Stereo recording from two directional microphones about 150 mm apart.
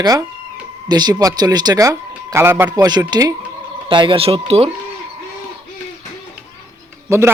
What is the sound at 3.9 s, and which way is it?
Speech, 35° right (ahead or behind).